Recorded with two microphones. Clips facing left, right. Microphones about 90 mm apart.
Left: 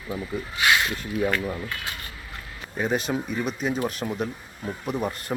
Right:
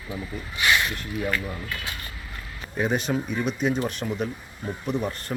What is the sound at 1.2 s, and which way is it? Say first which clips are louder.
Speech: left 3 dB; 15° left (ahead or behind).